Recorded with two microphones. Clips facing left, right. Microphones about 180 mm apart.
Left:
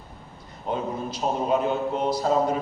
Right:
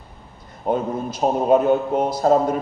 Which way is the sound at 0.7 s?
50° right (ahead or behind).